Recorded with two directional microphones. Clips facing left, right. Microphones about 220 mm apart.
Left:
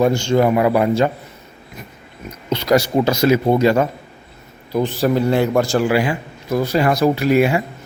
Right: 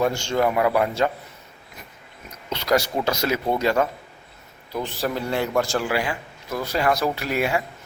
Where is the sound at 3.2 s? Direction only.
10° left (ahead or behind).